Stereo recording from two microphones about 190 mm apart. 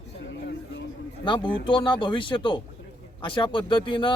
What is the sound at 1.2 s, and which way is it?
A man's voice, 25° left (ahead or behind).